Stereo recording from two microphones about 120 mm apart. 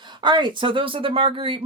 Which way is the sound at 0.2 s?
40° right (ahead or behind).